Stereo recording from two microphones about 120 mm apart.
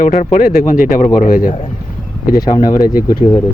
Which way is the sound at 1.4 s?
80° left.